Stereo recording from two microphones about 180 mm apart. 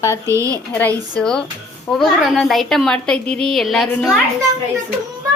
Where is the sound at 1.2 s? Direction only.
5° left (ahead or behind).